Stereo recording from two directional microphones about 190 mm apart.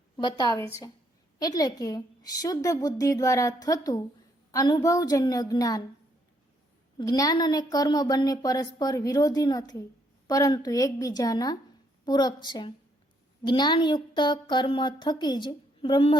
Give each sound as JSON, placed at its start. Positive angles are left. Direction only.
{"t": 0.2, "sound": "a woman's voice", "side_deg": 20}
{"t": 7.0, "sound": "a woman's voice", "side_deg": 20}